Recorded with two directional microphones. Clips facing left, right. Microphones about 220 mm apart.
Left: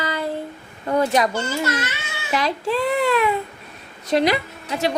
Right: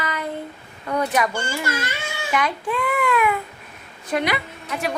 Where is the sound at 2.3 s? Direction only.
25° left (ahead or behind).